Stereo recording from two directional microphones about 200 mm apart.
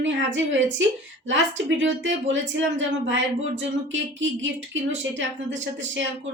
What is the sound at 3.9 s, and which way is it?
Speech, 70° right (ahead or behind).